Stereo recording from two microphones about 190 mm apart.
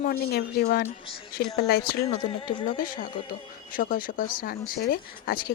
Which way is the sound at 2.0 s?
25° left (ahead or behind).